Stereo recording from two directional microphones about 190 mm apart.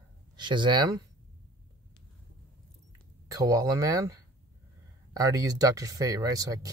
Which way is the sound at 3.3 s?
20° right (ahead or behind).